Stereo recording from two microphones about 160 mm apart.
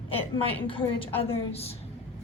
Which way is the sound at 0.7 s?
35° left (ahead or behind).